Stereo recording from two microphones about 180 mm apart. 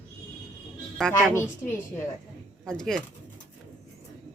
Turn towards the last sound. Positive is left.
turn(degrees=5)  # may be behind; listen again after turning